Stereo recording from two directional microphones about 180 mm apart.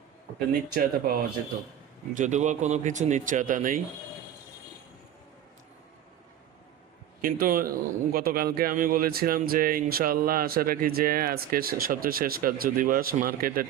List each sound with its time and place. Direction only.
0.3 s speech: 55° right (ahead or behind)
2.1 s speech: 40° right (ahead or behind)
7.2 s speech: 50° right (ahead or behind)